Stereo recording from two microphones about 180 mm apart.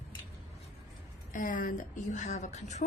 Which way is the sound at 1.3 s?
45° left (ahead or behind).